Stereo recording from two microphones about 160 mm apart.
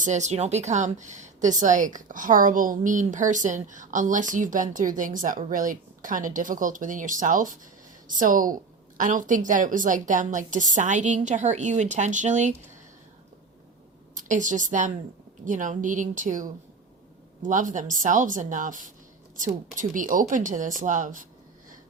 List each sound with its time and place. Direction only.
0.0 s a woman's voice: 45° right (ahead or behind)
14.2 s a woman's voice: 55° right (ahead or behind)